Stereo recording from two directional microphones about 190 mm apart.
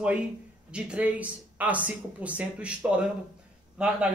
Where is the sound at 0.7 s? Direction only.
5° right (ahead or behind).